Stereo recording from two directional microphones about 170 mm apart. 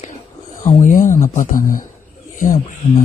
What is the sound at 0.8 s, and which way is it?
Speech, 50° left (ahead or behind).